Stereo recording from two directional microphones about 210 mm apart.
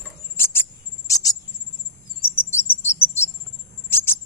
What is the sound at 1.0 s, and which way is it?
Cricket, 15° left (ahead or behind).